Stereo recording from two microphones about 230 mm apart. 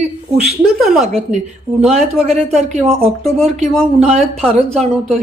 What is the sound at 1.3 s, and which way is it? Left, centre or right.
A woman's voice, right.